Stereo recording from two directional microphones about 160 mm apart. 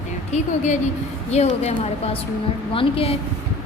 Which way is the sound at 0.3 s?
50° left (ahead or behind).